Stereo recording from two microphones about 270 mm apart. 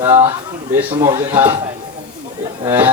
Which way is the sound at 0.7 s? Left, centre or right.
Centre.